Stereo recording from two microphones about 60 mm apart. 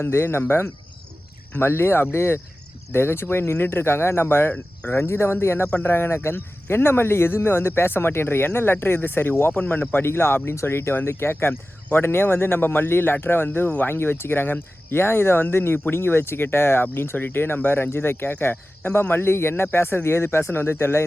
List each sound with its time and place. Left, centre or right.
0.0 s a man's voice: left